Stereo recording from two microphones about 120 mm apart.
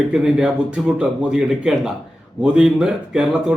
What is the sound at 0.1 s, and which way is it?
Speech, 5° right (ahead or behind).